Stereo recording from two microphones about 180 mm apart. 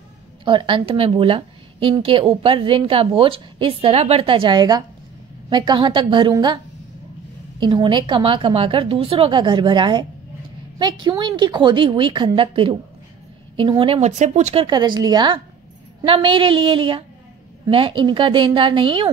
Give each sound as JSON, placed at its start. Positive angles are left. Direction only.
{"t": 0.5, "sound": "a woman's voice", "side_deg": -25}
{"t": 7.6, "sound": "a woman's voice", "side_deg": -25}